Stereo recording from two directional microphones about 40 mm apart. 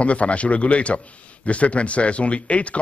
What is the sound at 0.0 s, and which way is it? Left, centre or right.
A man's voice, left.